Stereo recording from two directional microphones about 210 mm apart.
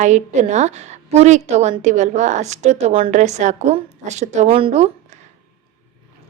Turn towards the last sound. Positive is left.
turn(degrees=-30)  # may be behind; listen again after turning